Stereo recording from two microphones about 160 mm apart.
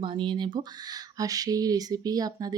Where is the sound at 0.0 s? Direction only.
30° right (ahead or behind).